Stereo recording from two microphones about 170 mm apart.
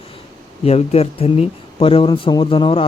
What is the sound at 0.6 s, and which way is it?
Speech, 40° left (ahead or behind).